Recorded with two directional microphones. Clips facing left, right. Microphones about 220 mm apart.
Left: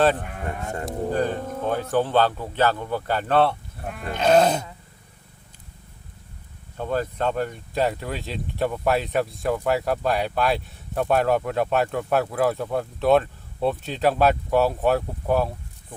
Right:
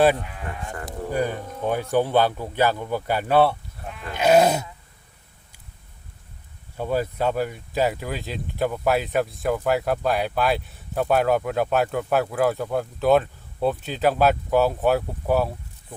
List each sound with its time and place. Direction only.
0.2 s speech: 50° left (ahead or behind)
1.1 s a man's voice: 10° right (ahead or behind)
3.8 s speech: 50° left (ahead or behind)
4.1 s a man's voice: 10° right (ahead or behind)
6.7 s speech: 10° right (ahead or behind)